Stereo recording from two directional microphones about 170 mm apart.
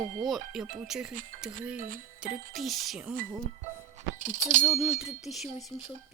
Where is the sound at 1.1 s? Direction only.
50° right (ahead or behind).